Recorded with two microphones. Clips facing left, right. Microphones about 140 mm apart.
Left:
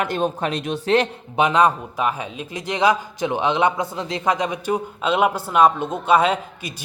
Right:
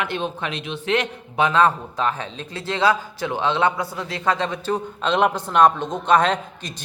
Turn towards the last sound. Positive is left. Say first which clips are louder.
# left 1 dB
turn(degrees=5)  # may be behind; listen again after turning